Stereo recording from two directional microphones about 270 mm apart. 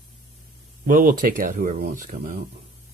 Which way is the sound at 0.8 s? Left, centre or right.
Right.